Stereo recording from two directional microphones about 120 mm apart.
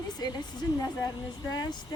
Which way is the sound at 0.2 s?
35° left (ahead or behind).